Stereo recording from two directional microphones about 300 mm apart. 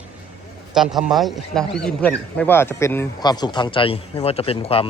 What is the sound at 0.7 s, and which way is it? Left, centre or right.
A man's voice, centre.